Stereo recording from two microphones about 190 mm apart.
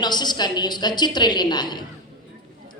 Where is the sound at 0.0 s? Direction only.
20° left (ahead or behind).